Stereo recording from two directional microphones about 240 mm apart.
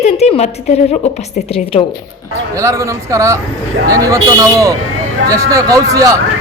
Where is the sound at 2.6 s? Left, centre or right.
Centre.